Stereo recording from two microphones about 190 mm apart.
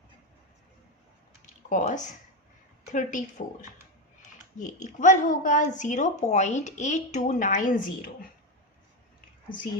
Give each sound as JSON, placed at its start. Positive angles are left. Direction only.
{"t": 1.7, "sound": "speech", "side_deg": 40}